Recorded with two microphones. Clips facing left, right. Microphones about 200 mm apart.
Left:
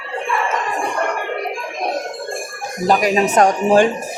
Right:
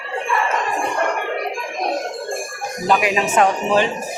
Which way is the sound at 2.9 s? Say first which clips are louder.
Left 3 dB; 40° left (ahead or behind).